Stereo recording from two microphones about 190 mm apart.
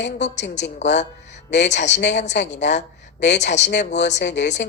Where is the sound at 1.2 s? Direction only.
65° left (ahead or behind).